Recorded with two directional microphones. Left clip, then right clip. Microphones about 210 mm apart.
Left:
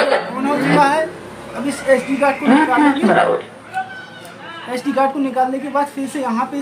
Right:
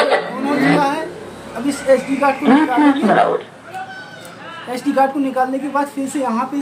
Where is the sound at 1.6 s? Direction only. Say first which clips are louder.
Right 1 dB; 5° right (ahead or behind).